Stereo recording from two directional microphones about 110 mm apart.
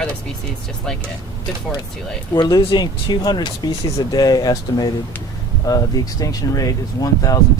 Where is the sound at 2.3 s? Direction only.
40° left (ahead or behind).